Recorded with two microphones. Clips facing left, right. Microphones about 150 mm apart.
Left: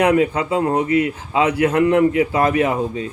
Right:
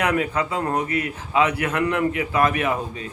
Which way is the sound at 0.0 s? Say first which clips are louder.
Left 6 dB; 25° left (ahead or behind).